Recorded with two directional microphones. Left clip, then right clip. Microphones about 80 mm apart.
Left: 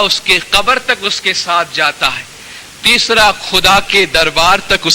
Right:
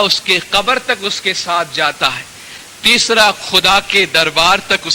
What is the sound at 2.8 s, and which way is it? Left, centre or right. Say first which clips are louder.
Speech: left 1 dB; right.